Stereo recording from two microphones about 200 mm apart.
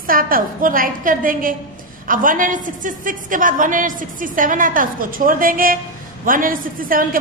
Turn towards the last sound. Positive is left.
turn(degrees=-45)  # may be behind; listen again after turning